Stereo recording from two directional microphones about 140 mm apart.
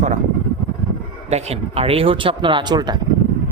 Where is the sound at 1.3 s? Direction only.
45° right (ahead or behind); by 3.0 s 30° right (ahead or behind).